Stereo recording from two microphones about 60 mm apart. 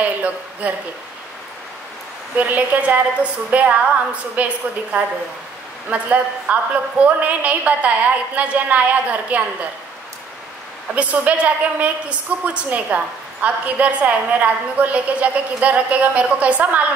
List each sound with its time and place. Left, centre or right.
0.0 s speech: right
2.3 s a woman's voice: right
5.9 s a woman's voice: right
11.0 s a woman's voice: right